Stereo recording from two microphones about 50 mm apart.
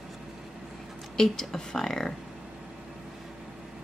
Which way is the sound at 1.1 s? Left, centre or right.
Centre.